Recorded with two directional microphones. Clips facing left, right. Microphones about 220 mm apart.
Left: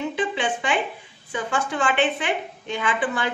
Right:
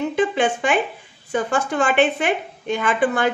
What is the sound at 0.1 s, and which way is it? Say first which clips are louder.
A woman's voice: right 6 dB; 45° right (ahead or behind).